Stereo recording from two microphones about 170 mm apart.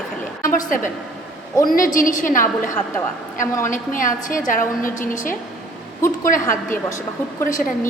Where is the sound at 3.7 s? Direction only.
50° left (ahead or behind).